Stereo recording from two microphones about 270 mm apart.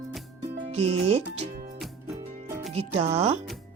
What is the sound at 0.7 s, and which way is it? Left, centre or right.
Speech, right.